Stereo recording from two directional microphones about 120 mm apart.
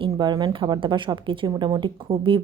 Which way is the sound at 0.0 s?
40° right (ahead or behind).